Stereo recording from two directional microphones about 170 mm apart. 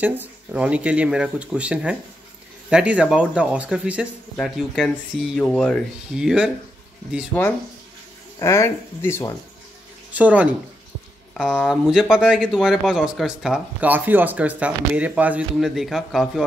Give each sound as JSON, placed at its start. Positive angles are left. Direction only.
{"t": 0.0, "sound": "speech", "side_deg": -10}
{"t": 6.1, "sound": "speech", "side_deg": -5}
{"t": 7.3, "sound": "speech", "side_deg": 10}
{"t": 10.1, "sound": "speech", "side_deg": -10}